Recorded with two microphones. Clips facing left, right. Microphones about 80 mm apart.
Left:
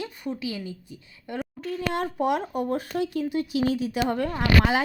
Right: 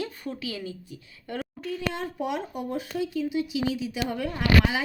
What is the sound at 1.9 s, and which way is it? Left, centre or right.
Speech, left.